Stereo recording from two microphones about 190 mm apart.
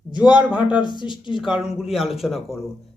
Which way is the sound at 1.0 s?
25° left (ahead or behind).